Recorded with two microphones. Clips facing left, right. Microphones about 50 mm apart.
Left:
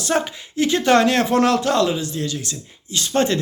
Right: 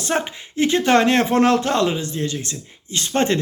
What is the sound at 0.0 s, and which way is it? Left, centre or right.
Speech, right.